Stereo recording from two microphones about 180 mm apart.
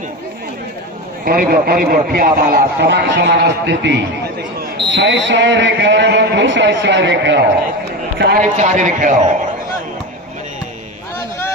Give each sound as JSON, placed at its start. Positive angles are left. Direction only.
{"t": 1.2, "sound": "a man's voice", "side_deg": -55}
{"t": 4.8, "sound": "speech", "side_deg": -85}
{"t": 8.4, "sound": "a man's voice", "side_deg": -45}